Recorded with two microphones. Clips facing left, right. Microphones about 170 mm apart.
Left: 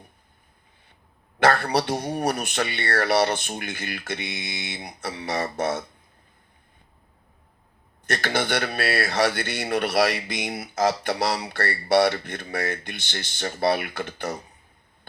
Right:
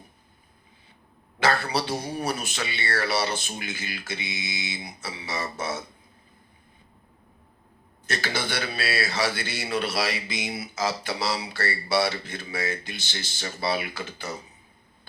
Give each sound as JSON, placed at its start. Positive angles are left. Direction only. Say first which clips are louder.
{"t": 1.4, "sound": "speech", "louder": "left 4 dB", "side_deg": 55}
{"t": 8.0, "sound": "speech", "louder": "left 4 dB", "side_deg": 55}